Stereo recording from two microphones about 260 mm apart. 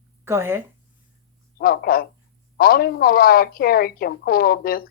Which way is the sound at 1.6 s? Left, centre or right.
Left.